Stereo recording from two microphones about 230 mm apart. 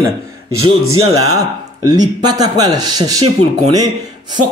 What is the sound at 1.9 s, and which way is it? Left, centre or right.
A man's voice, centre.